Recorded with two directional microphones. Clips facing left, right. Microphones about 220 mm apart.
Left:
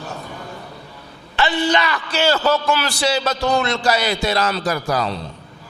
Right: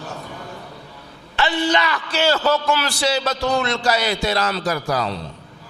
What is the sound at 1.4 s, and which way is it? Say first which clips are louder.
A man's voice: left 1 dB; 10° left (ahead or behind).